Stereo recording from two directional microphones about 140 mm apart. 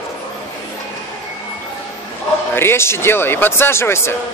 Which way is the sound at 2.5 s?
15° left (ahead or behind).